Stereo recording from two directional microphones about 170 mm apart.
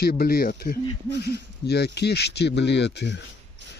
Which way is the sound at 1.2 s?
75° left (ahead or behind).